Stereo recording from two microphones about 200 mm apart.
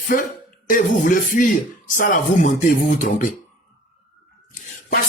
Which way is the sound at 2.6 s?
40° left (ahead or behind).